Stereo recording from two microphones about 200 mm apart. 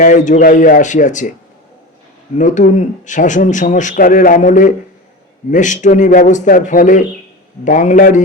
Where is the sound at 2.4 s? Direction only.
40° left (ahead or behind).